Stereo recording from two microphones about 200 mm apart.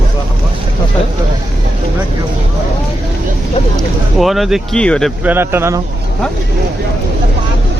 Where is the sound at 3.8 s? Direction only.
Centre (ahead or behind).